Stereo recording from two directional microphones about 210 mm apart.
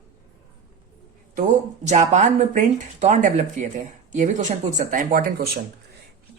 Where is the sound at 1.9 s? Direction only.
35° right (ahead or behind).